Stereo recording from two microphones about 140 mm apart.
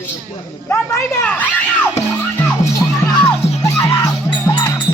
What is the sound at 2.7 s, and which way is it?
Music, 25° left (ahead or behind).